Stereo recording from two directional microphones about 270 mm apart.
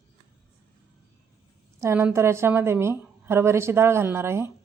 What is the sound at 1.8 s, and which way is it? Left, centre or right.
A woman's voice, centre.